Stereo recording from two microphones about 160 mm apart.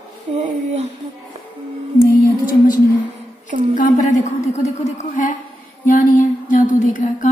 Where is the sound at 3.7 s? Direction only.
55° left (ahead or behind).